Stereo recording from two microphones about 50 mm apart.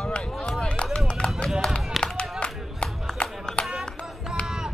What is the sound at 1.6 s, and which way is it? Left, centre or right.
Run, centre.